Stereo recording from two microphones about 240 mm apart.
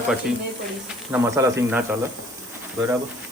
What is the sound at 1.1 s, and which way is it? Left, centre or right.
Speech, centre.